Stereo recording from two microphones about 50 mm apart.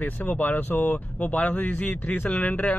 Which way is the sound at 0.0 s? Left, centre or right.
Left.